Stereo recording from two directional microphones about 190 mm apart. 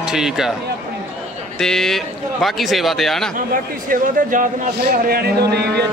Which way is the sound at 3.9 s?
45° right (ahead or behind).